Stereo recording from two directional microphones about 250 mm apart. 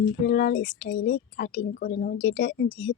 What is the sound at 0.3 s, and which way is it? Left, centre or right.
Speech, left.